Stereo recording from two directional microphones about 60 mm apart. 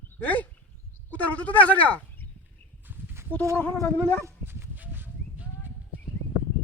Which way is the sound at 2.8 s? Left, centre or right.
Right.